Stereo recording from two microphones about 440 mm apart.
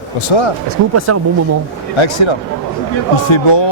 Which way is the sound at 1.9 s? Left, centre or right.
Left.